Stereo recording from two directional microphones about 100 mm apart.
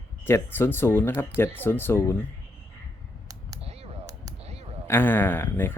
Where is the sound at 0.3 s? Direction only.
25° left (ahead or behind).